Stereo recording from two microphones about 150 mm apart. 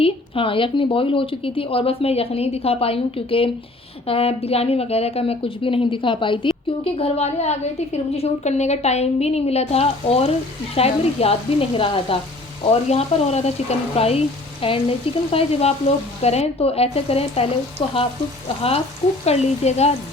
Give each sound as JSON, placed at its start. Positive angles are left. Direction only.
{"t": 0.0, "sound": "a woman's voice", "side_deg": 35}
{"t": 19.2, "sound": "a woman's voice", "side_deg": 45}